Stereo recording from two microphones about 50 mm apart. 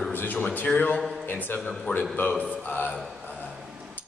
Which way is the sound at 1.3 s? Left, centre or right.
Left.